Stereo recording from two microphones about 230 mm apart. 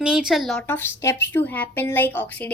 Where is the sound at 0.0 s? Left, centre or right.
Centre.